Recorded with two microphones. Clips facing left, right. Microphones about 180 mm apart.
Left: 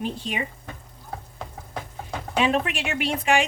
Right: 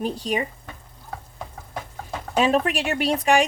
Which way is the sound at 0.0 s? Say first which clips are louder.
Right 4 dB; 40° right (ahead or behind).